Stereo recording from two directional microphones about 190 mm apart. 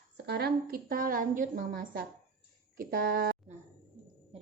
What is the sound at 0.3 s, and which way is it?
A woman's voice, 55° right (ahead or behind).